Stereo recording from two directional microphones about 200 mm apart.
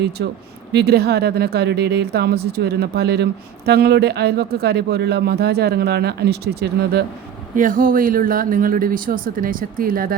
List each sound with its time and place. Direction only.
0.2 s speech: 60° right (ahead or behind)
7.5 s speech: 40° right (ahead or behind)